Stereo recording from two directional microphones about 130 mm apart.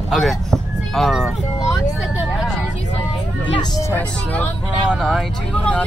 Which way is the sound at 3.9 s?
10° left (ahead or behind).